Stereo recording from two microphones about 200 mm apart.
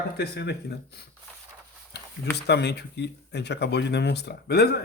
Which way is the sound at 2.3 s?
55° left (ahead or behind).